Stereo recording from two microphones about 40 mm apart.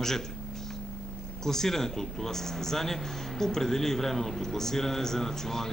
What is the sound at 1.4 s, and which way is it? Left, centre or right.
Speech, centre.